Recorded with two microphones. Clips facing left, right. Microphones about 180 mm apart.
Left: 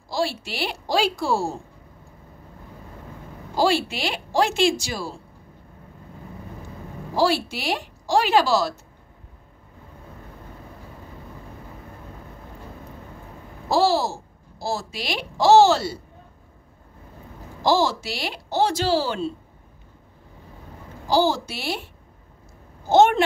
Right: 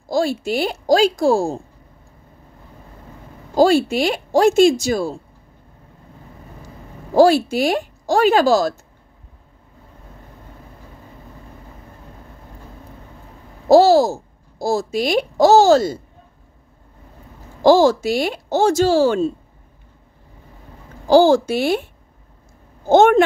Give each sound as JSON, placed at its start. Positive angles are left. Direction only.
{"t": 0.1, "sound": "speech", "side_deg": -45}
{"t": 3.5, "sound": "speech", "side_deg": -45}
{"t": 7.2, "sound": "speech", "side_deg": -45}
{"t": 13.7, "sound": "speech", "side_deg": -45}
{"t": 17.6, "sound": "speech", "side_deg": -50}
{"t": 21.1, "sound": "speech", "side_deg": -50}
{"t": 22.8, "sound": "speech", "side_deg": -50}